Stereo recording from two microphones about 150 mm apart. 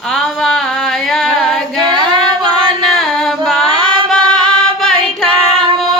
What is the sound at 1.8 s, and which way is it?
Female singing, 30° right (ahead or behind).